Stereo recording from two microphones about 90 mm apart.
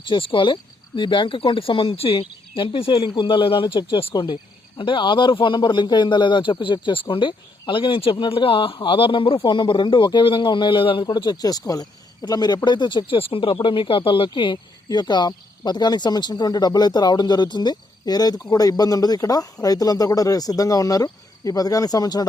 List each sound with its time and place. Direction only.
0.0 s a man's voice: 65° left (ahead or behind)
14.8 s speech: 50° left (ahead or behind)